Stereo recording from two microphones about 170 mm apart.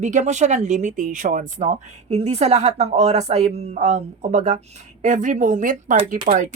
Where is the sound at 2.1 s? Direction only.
40° right (ahead or behind); by 6.5 s 55° right (ahead or behind).